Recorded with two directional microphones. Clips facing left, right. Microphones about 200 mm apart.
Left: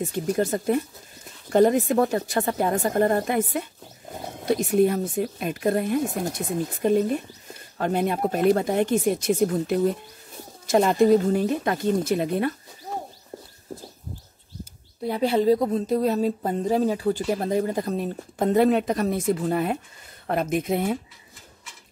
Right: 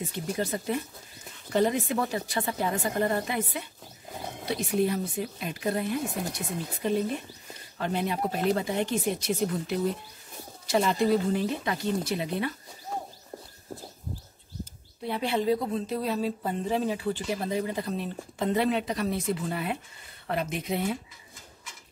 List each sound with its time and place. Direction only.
0.0 s speech: 45° left (ahead or behind)
15.0 s speech: 40° left (ahead or behind)